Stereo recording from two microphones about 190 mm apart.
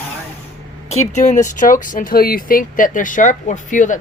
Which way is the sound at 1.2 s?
40° left (ahead or behind).